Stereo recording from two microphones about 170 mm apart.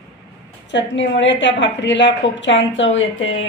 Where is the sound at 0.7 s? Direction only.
90° left.